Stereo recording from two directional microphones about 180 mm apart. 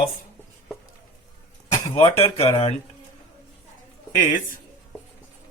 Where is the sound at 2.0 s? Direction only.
30° left (ahead or behind).